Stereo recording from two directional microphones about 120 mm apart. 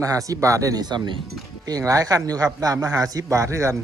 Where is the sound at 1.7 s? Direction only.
30° right (ahead or behind).